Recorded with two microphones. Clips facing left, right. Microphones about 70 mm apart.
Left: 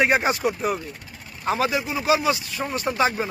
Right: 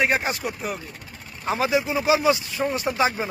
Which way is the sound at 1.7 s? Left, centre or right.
Centre.